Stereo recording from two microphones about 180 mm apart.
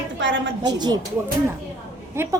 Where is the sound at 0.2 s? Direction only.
85° right.